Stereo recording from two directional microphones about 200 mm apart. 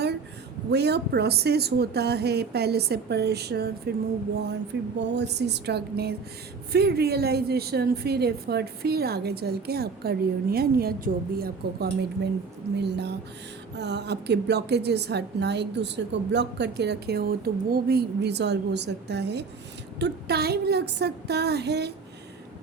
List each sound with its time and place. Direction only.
0.7 s a woman's voice: 55° right (ahead or behind)